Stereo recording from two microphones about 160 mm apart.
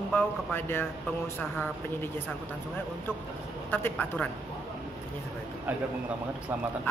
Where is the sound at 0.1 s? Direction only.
10° left (ahead or behind).